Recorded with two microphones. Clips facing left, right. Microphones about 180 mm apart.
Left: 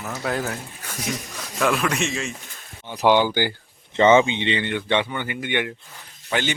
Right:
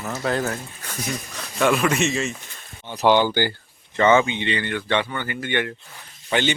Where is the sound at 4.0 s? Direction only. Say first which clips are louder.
Left 2 dB; 20° left (ahead or behind); by 6.5 s 5° left (ahead or behind).